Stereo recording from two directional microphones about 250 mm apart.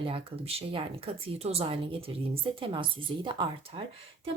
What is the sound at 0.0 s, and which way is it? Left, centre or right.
A woman's voice, right.